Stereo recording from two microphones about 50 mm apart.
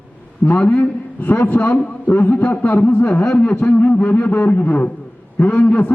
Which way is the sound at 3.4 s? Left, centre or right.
Left.